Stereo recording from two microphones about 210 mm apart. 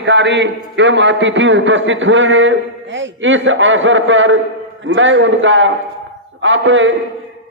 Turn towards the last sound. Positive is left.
turn(degrees=-65)  # may be behind; listen again after turning